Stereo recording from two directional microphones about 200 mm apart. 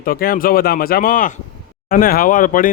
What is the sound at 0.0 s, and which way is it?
Speech, 45° left (ahead or behind).